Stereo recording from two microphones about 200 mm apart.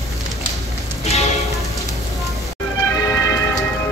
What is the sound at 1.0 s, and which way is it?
Music, 35° left (ahead or behind).